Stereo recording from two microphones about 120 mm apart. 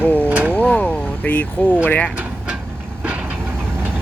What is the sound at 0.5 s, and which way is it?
Speech, 10° left (ahead or behind).